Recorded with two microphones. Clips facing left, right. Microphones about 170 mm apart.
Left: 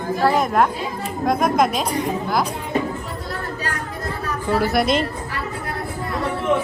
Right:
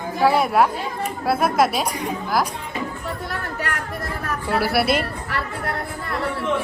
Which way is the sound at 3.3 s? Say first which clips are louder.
Left 3 dB; 65° right (ahead or behind).